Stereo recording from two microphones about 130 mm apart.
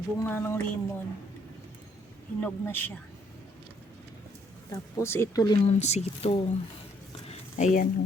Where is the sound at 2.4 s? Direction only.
15° left (ahead or behind).